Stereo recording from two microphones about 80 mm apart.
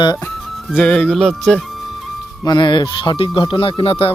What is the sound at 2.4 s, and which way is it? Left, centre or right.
Speech, left.